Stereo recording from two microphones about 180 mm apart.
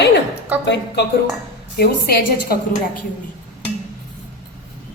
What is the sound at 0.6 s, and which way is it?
A woman's voice, 70° left (ahead or behind).